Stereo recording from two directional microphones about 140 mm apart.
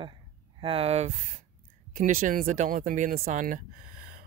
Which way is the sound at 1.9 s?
75° right (ahead or behind).